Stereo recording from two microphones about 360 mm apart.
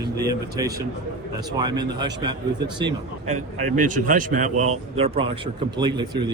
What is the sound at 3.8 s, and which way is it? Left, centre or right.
A man's voice, right.